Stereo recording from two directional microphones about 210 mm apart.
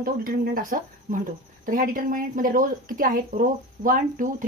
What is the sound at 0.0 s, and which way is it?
A woman's voice, 45° right (ahead or behind).